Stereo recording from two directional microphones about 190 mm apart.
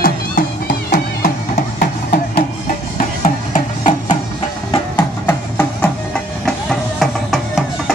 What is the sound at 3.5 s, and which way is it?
Music, 40° left (ahead or behind).